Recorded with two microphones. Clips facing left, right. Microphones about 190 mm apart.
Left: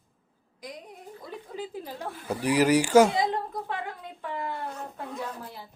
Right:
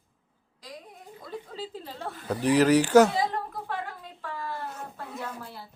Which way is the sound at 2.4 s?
10° left (ahead or behind).